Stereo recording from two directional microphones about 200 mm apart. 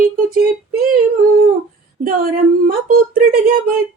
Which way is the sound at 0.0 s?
45° right (ahead or behind).